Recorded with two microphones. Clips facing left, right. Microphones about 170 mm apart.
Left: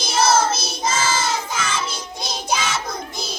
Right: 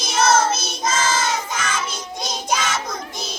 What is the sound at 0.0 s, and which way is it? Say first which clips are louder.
Child singing: even; 30° left (ahead or behind).